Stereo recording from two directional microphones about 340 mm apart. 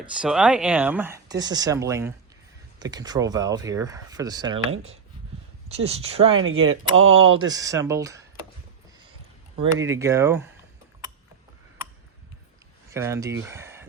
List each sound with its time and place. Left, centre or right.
0.0 s speech: centre
5.6 s speech: centre
6.4 s speech: right
7.3 s speech: centre
9.7 s speech: centre
12.9 s speech: centre